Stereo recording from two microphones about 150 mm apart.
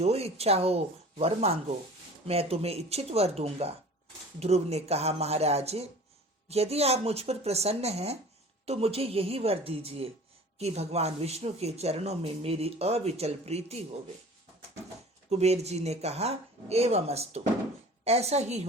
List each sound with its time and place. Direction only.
0.0 s speech: 45° right (ahead or behind)
15.3 s speech: 45° right (ahead or behind)